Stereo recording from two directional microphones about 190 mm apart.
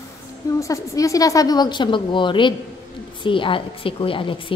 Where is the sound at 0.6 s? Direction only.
15° left (ahead or behind).